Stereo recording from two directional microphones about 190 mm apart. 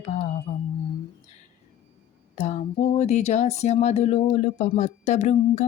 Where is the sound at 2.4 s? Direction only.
35° left (ahead or behind).